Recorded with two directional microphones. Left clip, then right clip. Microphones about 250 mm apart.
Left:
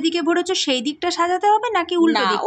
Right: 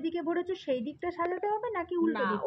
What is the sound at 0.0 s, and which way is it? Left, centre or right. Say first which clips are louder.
A woman's voice: left 13 dB; centre.